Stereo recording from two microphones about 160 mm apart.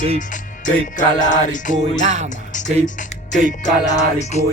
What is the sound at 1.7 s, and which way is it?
Music, 45° right (ahead or behind).